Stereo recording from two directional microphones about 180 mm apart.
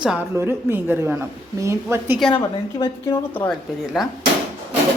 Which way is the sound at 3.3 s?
10° left (ahead or behind).